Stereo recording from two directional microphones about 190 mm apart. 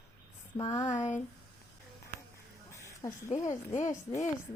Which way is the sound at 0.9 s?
40° left (ahead or behind).